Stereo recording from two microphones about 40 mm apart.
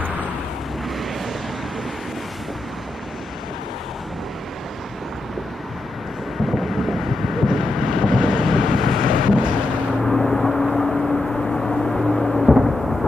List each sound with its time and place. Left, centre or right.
6.4 s vehicle: centre
12.6 s thunder: centre